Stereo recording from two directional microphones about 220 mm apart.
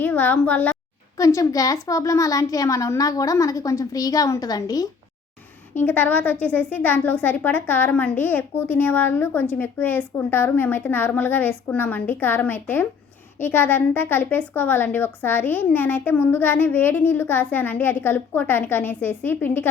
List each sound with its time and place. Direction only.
0.0 s a woman's voice: 10° left (ahead or behind)